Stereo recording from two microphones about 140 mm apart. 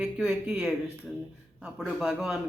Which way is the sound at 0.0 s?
5° right (ahead or behind).